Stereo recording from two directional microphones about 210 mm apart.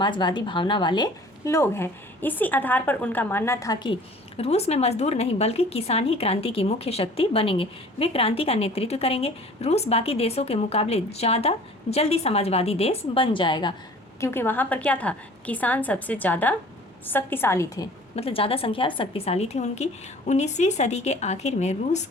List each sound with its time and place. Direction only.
0.0 s a woman's voice: 20° left (ahead or behind)
4.4 s speech: 30° left (ahead or behind)
14.2 s a woman's voice: 10° left (ahead or behind)
18.2 s a woman's voice: 25° left (ahead or behind)